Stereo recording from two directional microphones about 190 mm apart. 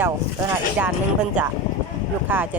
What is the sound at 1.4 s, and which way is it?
Speech, 10° right (ahead or behind).